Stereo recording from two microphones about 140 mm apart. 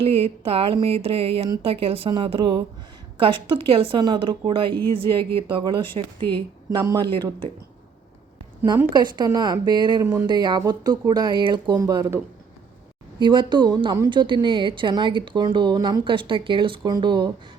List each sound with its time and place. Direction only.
0.0 s a sound: 45° right (ahead or behind)
1.6 s speech: 45° right (ahead or behind)
6.7 s speech: 25° right (ahead or behind)
8.9 s speech: 30° right (ahead or behind)
13.1 s speech: 35° right (ahead or behind)
14.1 s speech: 35° right (ahead or behind)